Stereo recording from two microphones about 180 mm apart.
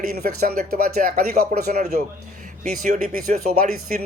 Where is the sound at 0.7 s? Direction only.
55° right (ahead or behind).